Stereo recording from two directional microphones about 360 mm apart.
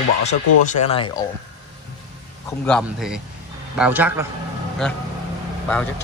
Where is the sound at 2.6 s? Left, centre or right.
Centre.